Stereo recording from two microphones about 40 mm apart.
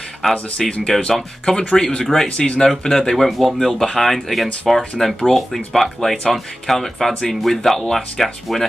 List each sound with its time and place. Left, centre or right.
0.3 s speech: left
4.0 s speech: centre